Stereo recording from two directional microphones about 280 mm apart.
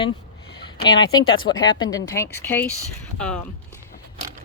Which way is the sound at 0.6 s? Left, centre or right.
Centre.